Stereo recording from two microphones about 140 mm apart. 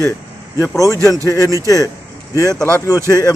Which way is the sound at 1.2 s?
25° left (ahead or behind).